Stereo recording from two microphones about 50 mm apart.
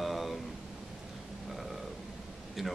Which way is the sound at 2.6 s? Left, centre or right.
Centre.